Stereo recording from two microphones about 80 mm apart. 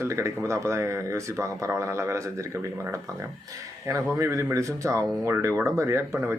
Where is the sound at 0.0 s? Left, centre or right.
Right.